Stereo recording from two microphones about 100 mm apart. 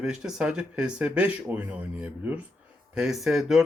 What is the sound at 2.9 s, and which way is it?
Speech, 5° right (ahead or behind).